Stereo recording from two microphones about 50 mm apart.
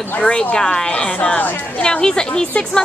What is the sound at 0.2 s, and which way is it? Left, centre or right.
A woman's voice, left.